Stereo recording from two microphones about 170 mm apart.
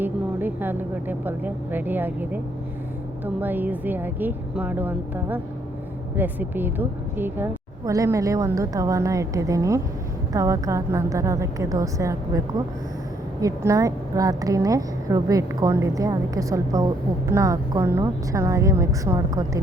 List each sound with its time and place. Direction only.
0.0 s a woman's voice: 10° right (ahead or behind)